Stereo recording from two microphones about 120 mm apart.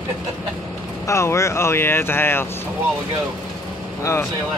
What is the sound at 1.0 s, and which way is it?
Speech, 25° left (ahead or behind).